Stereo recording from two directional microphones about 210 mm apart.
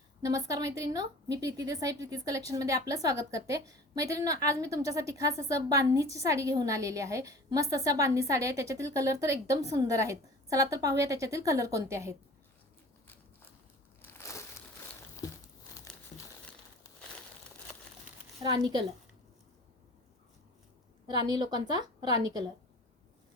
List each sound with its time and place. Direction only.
0.2 s a woman's voice: 15° right (ahead or behind)
14.0 s crumpling: 15° left (ahead or behind)
21.1 s a woman's voice: 20° right (ahead or behind)